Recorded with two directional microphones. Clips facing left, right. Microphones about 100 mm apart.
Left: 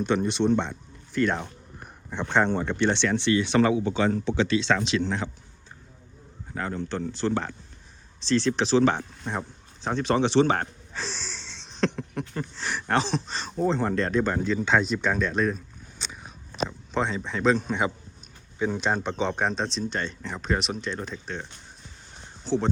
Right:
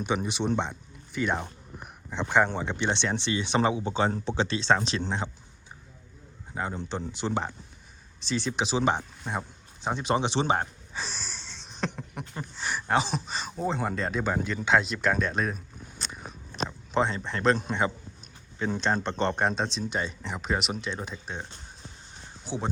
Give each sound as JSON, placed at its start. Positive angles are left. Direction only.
{"t": 0.0, "sound": "speech", "side_deg": -10}
{"t": 2.6, "sound": "speech", "side_deg": -20}
{"t": 3.8, "sound": "speech", "side_deg": -30}
{"t": 6.5, "sound": "speech", "side_deg": -15}
{"t": 9.2, "sound": "speech", "side_deg": -5}
{"t": 22.4, "sound": "speech", "side_deg": -10}